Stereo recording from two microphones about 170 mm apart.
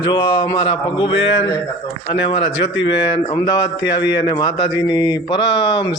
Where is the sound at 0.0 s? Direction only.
25° left (ahead or behind).